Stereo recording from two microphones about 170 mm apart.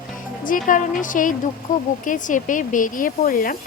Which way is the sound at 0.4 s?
50° left (ahead or behind).